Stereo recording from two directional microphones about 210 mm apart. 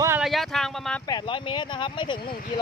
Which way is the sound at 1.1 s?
20° left (ahead or behind).